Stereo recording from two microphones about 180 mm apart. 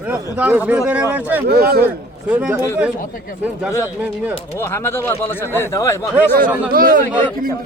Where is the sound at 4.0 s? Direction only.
10° right (ahead or behind).